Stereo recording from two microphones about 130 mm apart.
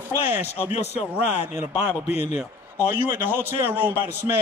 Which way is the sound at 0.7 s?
55° left (ahead or behind).